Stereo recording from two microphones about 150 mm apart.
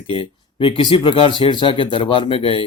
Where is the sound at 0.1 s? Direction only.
35° left (ahead or behind).